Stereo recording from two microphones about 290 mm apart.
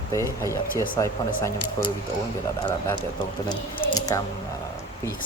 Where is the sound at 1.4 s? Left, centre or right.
Centre.